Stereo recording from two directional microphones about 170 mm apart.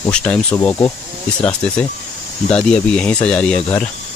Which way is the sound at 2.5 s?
5° left (ahead or behind).